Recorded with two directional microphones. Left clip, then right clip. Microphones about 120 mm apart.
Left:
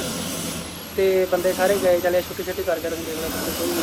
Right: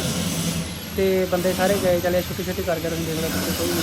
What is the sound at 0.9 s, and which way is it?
Speech, 5° left (ahead or behind).